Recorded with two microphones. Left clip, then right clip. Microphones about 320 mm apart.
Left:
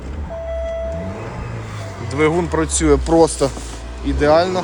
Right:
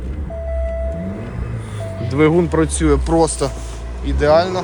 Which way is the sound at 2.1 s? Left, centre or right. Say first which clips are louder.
Right 2 dB; centre.